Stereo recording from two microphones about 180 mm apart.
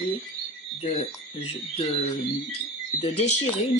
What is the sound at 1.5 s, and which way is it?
Speech, 35° left (ahead or behind).